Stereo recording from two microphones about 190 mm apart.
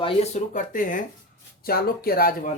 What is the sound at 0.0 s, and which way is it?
Speech, 40° left (ahead or behind).